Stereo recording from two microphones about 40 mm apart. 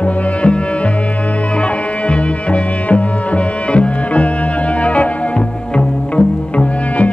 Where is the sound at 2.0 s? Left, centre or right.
Left.